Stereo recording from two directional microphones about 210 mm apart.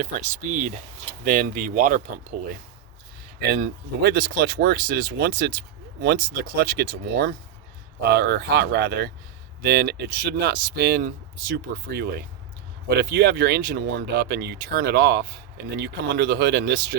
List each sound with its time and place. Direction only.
0.0 s speech: 40° right (ahead or behind)
3.4 s speech: 50° right (ahead or behind)